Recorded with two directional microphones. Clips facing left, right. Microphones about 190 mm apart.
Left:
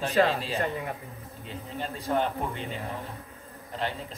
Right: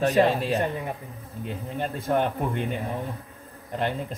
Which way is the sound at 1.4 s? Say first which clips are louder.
Right 5 dB; 55° right (ahead or behind).